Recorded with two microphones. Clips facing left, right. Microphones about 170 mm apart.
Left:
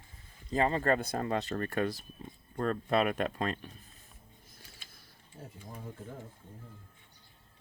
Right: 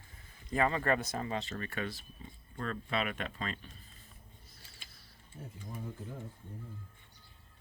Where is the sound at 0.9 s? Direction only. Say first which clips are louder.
Left 4 dB; 55° left (ahead or behind).